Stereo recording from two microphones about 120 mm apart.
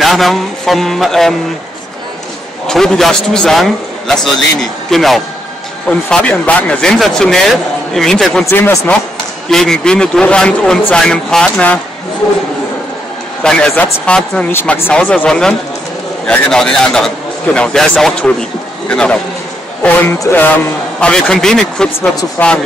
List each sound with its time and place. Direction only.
0.0 s speech: centre (ahead or behind)
2.6 s speech: 5° left (ahead or behind)
8.5 s a man's voice: 20° left (ahead or behind)
9.5 s a man's voice: 5° left (ahead or behind)
13.4 s a man's voice: 10° left (ahead or behind)
14.5 s a man's voice: 20° left (ahead or behind)
20.2 s a man's voice: 15° left (ahead or behind)
21.0 s speech: 5° left (ahead or behind)
22.4 s a man's voice: 15° left (ahead or behind)